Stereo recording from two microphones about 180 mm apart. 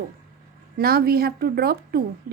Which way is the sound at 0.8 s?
60° right (ahead or behind).